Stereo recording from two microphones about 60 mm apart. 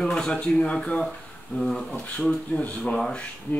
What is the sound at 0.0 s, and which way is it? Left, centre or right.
Speech, centre.